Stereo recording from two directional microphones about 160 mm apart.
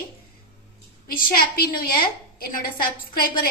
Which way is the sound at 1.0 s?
65° left (ahead or behind).